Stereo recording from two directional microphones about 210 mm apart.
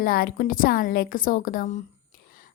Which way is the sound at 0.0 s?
45° left (ahead or behind).